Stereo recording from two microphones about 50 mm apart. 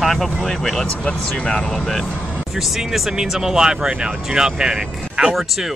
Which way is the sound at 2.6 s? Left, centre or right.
Centre.